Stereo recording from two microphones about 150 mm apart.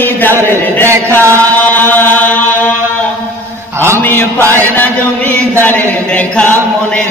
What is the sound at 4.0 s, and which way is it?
Mantra, 15° left (ahead or behind).